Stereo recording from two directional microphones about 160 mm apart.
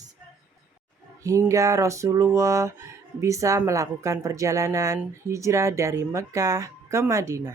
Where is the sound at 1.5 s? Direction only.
20° right (ahead or behind).